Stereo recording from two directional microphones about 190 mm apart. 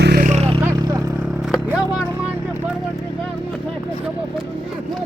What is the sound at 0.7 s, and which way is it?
Vehicle, 20° right (ahead or behind).